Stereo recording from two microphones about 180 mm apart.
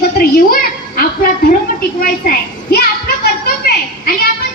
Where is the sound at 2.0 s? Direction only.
55° left (ahead or behind).